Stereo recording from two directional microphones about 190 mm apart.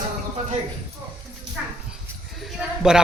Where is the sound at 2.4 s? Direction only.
5° right (ahead or behind).